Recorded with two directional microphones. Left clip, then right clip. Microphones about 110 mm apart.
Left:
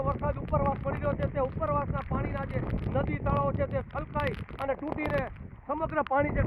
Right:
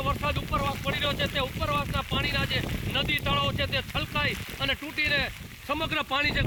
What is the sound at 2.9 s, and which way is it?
Speech, 45° left (ahead or behind).